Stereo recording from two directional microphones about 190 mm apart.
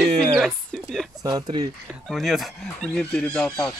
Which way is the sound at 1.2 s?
20° right (ahead or behind).